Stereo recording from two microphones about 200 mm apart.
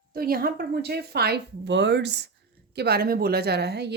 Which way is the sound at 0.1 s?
50° right (ahead or behind).